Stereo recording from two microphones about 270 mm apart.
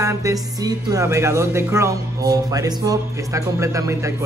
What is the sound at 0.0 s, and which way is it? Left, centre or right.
Speech, centre.